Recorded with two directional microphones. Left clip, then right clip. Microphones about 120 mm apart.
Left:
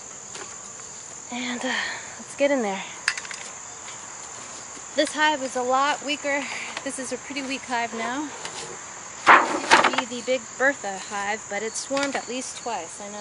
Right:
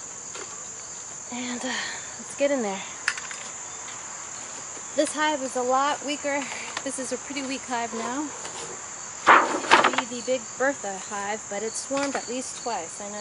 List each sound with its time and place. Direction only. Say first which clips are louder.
1.3 s speech: left 4 dB; 25° left (ahead or behind)
4.9 s speech: left 3 dB; 15° left (ahead or behind)
9.2 s speech: left 2 dB; 30° left (ahead or behind); by 12.8 s 5° left (ahead or behind)